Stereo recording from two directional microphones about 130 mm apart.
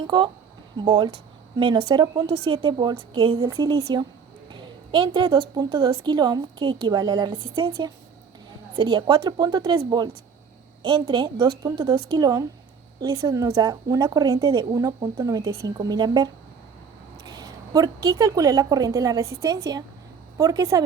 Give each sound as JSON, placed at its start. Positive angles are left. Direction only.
{"t": 0.0, "sound": "a woman's voice", "side_deg": -35}
{"t": 3.4, "sound": "a woman's voice", "side_deg": -25}
{"t": 11.1, "sound": "a woman's voice", "side_deg": -35}